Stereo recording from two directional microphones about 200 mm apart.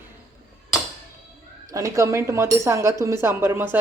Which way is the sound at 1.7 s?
15° right (ahead or behind).